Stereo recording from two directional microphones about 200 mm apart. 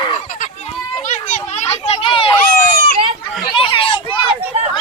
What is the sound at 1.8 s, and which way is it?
Speech, 30° left (ahead or behind).